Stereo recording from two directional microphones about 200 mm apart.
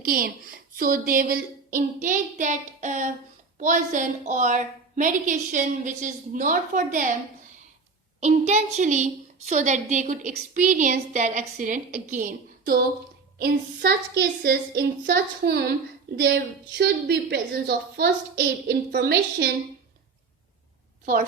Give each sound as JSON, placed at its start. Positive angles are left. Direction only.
{"t": 0.0, "sound": "a woman's voice", "side_deg": -45}
{"t": 8.2, "sound": "a woman's voice", "side_deg": -35}
{"t": 21.0, "sound": "a woman's voice", "side_deg": -45}